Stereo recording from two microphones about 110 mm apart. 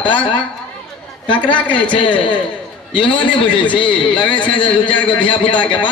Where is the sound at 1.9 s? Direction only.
45° left (ahead or behind).